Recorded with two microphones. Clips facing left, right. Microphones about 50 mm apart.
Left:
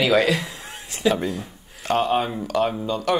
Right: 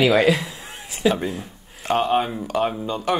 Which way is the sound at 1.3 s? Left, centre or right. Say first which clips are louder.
Left 1 dB; right.